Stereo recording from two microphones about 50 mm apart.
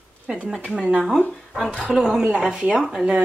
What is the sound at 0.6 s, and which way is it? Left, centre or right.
Speech, right.